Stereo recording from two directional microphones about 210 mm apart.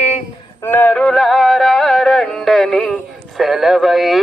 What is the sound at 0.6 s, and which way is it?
Music, 10° left (ahead or behind).